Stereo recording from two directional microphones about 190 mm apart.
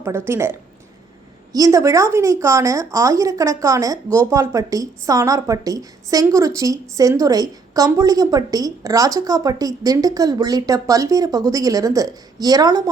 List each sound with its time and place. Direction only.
0.0 s speech: 15° right (ahead or behind)
1.5 s speech: 15° right (ahead or behind)